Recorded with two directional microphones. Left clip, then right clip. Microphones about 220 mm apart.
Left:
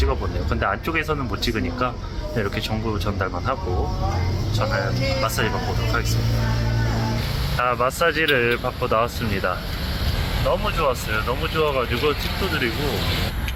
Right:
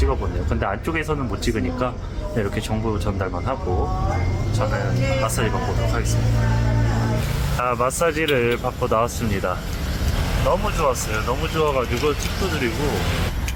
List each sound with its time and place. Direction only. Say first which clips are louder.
0.6 s speech: left 2 dB; 5° right (ahead or behind)
7.6 s speech: even; 5° right (ahead or behind)